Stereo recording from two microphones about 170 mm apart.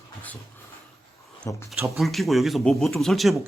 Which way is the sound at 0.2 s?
10° left (ahead or behind).